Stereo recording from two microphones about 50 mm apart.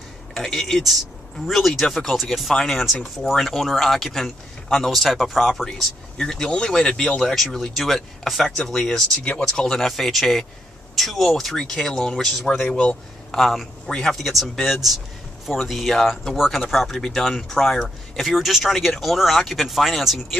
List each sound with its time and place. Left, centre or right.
0.3 s speech: centre
6.1 s speech: centre
13.4 s speech: centre